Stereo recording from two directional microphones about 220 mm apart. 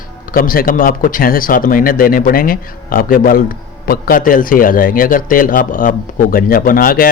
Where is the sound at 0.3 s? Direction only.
40° left (ahead or behind).